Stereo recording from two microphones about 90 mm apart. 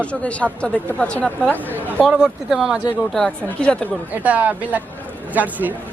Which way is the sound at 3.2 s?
10° left (ahead or behind).